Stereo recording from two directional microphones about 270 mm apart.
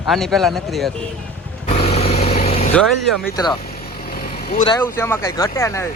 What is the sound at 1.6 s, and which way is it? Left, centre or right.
Vehicle, left.